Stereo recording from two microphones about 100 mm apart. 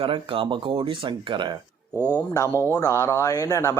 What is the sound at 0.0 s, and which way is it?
Speech, 60° right (ahead or behind).